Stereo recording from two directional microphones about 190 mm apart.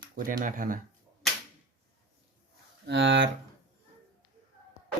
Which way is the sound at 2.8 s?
70° right (ahead or behind).